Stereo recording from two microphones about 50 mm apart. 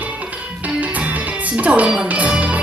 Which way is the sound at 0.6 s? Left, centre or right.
Right.